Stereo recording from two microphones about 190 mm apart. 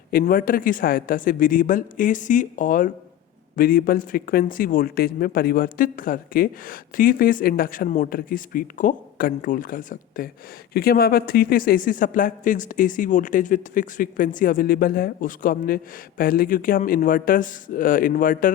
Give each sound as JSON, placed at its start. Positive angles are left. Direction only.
{"t": 0.1, "sound": "a man's voice", "side_deg": 50}